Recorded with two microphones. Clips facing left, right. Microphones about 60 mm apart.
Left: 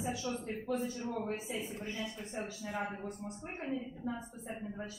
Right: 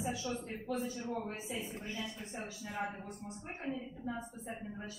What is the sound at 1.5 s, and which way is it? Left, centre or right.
A man's voice, centre.